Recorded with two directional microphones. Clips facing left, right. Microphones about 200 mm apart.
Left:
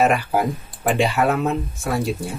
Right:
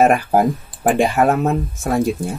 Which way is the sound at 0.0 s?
45° right (ahead or behind).